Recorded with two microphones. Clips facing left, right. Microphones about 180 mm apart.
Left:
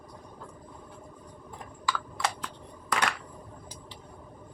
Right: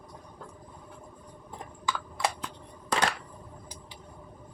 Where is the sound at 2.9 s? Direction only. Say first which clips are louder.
Right 2 dB; 30° right (ahead or behind).